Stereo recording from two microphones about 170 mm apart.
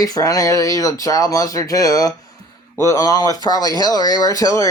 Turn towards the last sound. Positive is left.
turn(degrees=20)  # may be behind; listen again after turning